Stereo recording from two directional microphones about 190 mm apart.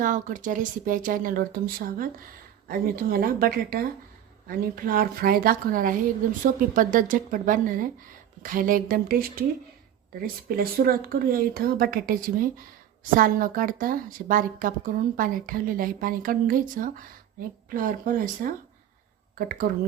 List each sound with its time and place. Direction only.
0.0 s speech: 45° right (ahead or behind)